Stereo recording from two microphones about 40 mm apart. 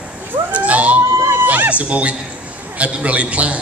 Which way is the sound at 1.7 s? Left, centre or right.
Right.